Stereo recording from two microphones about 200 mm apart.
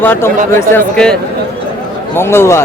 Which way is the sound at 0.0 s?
10° left (ahead or behind).